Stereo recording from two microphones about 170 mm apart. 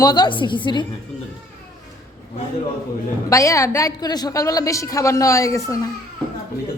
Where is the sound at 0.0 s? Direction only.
25° left (ahead or behind).